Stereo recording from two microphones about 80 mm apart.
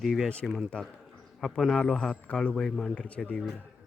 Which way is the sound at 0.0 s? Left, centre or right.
Centre.